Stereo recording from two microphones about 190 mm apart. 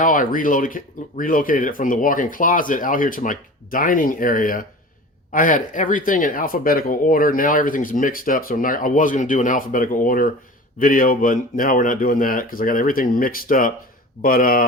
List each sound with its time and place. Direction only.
0.0 s speech: 45° left (ahead or behind)